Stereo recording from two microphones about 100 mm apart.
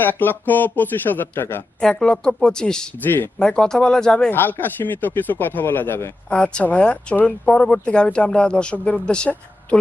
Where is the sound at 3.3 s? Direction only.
5° left (ahead or behind).